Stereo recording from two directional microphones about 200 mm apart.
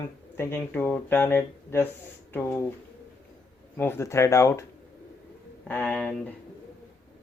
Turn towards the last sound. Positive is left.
turn(degrees=5)  # may be behind; listen again after turning